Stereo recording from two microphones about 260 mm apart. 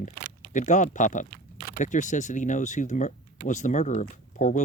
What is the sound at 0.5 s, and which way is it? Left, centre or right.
Speech, left.